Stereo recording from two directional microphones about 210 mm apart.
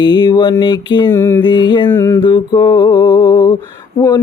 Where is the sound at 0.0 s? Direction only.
20° left (ahead or behind).